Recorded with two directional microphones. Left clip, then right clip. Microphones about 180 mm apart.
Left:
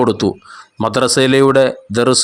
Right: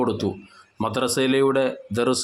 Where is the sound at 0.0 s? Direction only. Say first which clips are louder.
Left 9 dB; 35° left (ahead or behind).